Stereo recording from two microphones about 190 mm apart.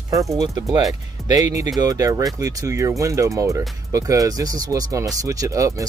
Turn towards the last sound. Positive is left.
turn(degrees=-15)  # may be behind; listen again after turning